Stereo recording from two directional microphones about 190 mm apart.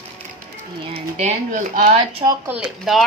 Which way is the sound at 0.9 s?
35° right (ahead or behind).